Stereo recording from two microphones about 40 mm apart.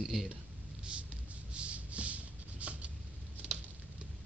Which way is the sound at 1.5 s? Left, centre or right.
Right.